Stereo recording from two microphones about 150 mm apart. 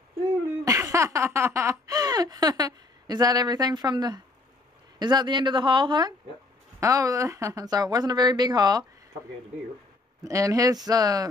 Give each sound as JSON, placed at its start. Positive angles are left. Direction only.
{"t": 0.7, "sound": "a sound", "side_deg": -20}
{"t": 4.9, "sound": "speech", "side_deg": -30}
{"t": 10.2, "sound": "speech", "side_deg": -20}